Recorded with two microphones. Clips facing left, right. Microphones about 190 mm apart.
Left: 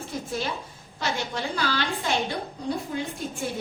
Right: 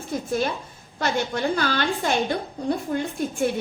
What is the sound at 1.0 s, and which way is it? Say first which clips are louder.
A woman's voice: right 5 dB; 50° right (ahead or behind).